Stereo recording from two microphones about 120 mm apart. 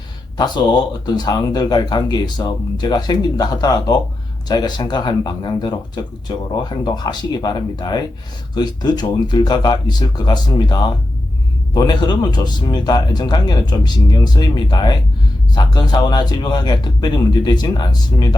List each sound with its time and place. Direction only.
0.3 s speech: 35° left (ahead or behind)